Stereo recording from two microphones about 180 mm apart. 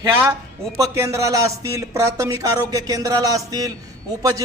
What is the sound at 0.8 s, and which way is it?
Speech, 15° right (ahead or behind).